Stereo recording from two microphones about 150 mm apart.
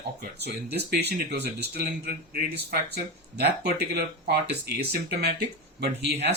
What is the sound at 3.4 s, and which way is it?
Speech, 90° right.